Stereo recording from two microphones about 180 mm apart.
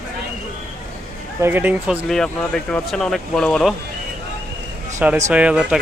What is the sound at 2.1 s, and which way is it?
Speech, centre (ahead or behind).